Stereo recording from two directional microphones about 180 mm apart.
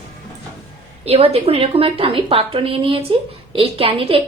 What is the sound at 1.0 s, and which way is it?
A woman's voice, 35° right (ahead or behind).